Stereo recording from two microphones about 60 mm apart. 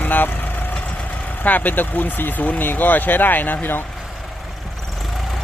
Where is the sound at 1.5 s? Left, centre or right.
Left.